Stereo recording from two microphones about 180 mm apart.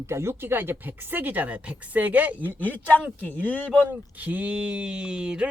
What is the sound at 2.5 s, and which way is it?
Speech, 10° left (ahead or behind).